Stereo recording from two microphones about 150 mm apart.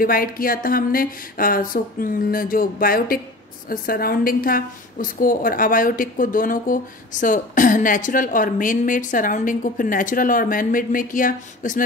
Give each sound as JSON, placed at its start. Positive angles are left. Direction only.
{"t": 0.0, "sound": "a woman's voice", "side_deg": 70}